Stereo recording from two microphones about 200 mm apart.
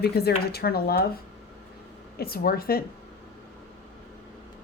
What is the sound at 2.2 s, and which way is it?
Speech, 50° left (ahead or behind).